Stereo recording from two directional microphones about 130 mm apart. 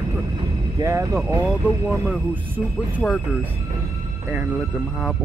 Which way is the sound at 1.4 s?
5° right (ahead or behind).